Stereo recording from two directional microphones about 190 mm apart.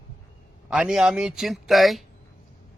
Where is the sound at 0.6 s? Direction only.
5° right (ahead or behind).